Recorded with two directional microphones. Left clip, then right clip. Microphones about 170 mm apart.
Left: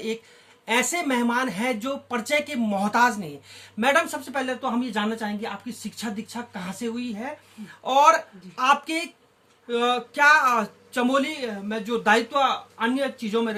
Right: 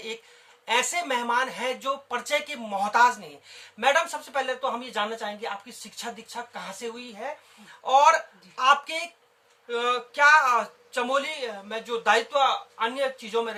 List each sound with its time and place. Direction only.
0.6 s speech: 20° left (ahead or behind)